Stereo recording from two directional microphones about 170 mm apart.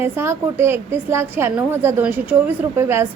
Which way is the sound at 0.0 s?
15° right (ahead or behind).